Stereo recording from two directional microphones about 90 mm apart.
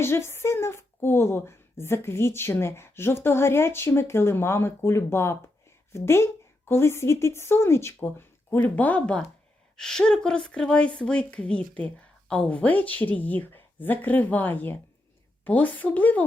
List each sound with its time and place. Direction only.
0.0 s a woman's voice: 30° left (ahead or behind)